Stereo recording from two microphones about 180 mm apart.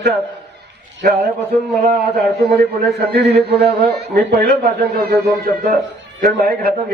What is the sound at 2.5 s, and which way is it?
A man's voice, 60° right (ahead or behind).